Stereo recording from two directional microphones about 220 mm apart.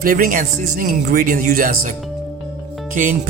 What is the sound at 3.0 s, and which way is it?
Speech, 35° right (ahead or behind).